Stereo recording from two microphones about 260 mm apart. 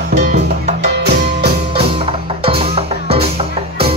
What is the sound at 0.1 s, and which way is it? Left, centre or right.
Music, right.